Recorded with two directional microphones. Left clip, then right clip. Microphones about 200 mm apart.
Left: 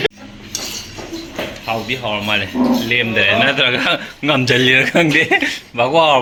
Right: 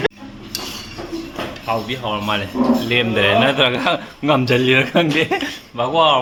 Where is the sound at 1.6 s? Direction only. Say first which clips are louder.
Left 1 dB; 15° left (ahead or behind).